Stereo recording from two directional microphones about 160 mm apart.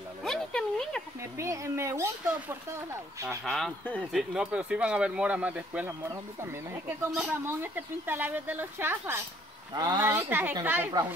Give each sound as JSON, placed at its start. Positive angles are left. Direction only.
{"t": 0.2, "sound": "a sound", "side_deg": 5}
{"t": 1.4, "sound": "speech", "side_deg": -20}
{"t": 3.4, "sound": "speech", "side_deg": 5}